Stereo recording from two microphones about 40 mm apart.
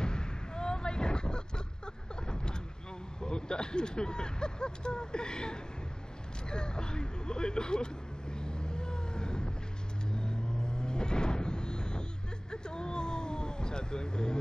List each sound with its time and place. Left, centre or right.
0.0 s a sound: left
3.2 s speech: left
6.5 s vehicle: left